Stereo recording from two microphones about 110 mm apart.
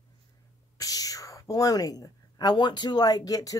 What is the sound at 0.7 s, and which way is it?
A woman's voice, 35° left (ahead or behind).